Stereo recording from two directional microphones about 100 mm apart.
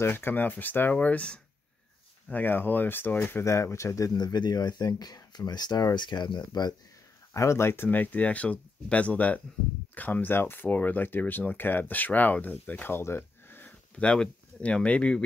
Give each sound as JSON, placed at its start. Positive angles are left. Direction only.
{"t": 0.0, "sound": "speech", "side_deg": 20}
{"t": 7.3, "sound": "speech", "side_deg": 30}